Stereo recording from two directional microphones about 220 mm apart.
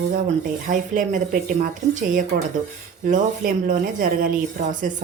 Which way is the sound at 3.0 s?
40° right (ahead or behind).